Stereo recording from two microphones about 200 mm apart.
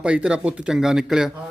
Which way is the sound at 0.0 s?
5° right (ahead or behind).